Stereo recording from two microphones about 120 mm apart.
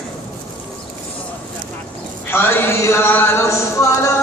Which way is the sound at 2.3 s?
20° left (ahead or behind).